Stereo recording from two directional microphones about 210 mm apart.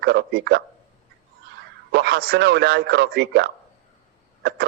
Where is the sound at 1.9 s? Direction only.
50° right (ahead or behind).